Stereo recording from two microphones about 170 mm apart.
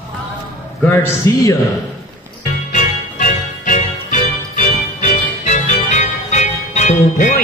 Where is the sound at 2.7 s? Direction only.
50° left (ahead or behind).